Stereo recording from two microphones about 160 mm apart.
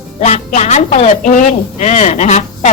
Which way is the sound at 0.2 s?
50° left (ahead or behind).